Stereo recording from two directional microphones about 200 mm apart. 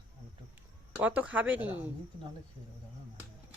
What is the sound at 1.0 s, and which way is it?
Speech, 10° right (ahead or behind).